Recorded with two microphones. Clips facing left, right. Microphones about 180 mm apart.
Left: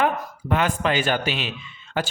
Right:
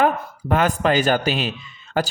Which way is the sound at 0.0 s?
45° right (ahead or behind).